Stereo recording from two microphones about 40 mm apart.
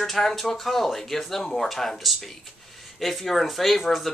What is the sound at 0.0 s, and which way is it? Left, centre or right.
Speech, centre.